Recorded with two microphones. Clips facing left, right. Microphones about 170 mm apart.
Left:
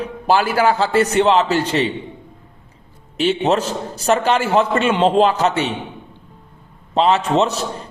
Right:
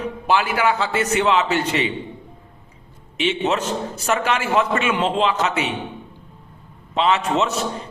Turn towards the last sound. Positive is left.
turn(degrees=35)  # may be behind; listen again after turning